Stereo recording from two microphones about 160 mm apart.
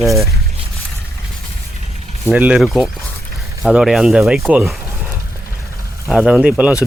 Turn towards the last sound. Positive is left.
turn(degrees=-5)  # may be behind; listen again after turning